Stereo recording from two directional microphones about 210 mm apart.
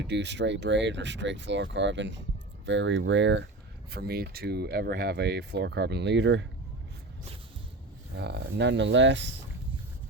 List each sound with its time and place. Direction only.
0.0 s speech: 55° right (ahead or behind)
3.9 s speech: 50° right (ahead or behind)
8.1 s speech: 55° right (ahead or behind)